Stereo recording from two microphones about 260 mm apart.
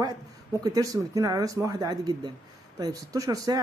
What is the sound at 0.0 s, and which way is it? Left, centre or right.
Speech, centre.